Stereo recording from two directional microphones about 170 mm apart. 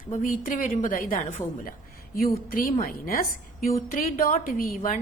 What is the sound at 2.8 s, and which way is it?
A woman's voice, 55° left (ahead or behind).